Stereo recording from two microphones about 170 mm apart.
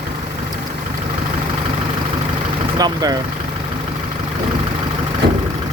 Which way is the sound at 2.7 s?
25° right (ahead or behind).